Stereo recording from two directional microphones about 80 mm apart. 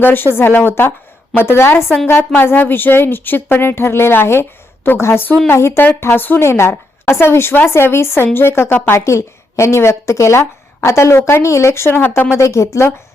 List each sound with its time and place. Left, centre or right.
0.0 s speech: left
12.4 s speech: left